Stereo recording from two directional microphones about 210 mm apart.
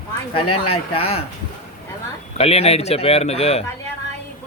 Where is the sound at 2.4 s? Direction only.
30° left (ahead or behind).